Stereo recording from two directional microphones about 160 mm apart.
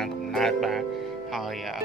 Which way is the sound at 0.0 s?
Centre (ahead or behind).